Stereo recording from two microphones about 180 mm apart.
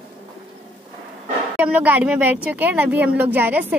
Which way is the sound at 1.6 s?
10° right (ahead or behind).